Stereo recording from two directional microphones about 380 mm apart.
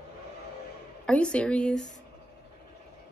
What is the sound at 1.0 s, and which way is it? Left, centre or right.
Speech, centre.